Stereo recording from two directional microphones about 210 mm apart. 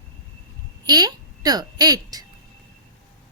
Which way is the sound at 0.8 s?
20° right (ahead or behind).